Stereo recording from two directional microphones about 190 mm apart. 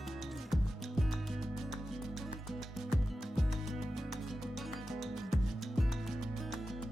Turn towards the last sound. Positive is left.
turn(degrees=0)  # may be behind; listen again after turning